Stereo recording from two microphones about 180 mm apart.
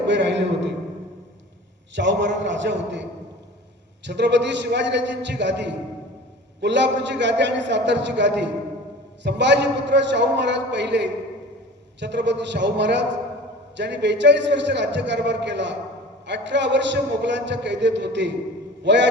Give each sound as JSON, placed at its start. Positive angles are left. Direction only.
{"t": 0.0, "sound": "a man's voice", "side_deg": -80}
{"t": 2.0, "sound": "a man's voice", "side_deg": -80}